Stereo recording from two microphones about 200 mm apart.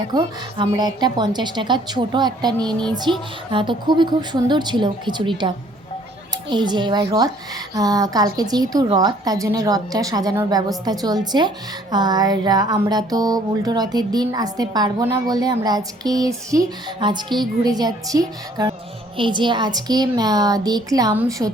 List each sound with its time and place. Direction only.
0.1 s a woman's voice: 25° right (ahead or behind)
6.5 s a woman's voice: 20° right (ahead or behind)